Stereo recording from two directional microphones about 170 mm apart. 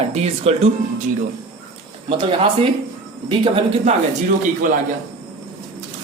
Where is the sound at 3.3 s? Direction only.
35° right (ahead or behind).